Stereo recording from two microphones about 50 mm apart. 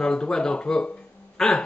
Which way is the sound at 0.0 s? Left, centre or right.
Centre.